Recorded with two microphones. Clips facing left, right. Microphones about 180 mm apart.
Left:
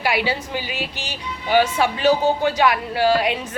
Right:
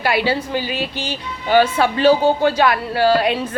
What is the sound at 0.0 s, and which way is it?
A woman's voice, 15° left (ahead or behind).